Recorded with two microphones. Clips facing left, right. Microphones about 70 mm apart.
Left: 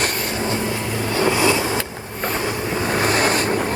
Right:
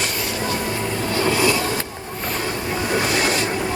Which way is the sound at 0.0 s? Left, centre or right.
Left.